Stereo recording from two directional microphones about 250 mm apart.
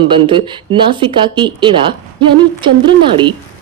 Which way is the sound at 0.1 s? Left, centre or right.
Centre.